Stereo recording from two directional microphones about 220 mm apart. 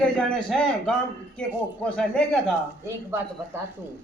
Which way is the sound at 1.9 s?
5° left (ahead or behind).